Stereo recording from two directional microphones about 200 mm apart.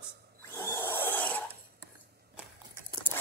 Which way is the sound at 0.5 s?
10° left (ahead or behind).